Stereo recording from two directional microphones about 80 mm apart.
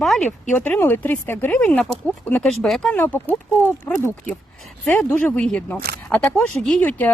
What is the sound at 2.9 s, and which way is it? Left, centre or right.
Speech, left.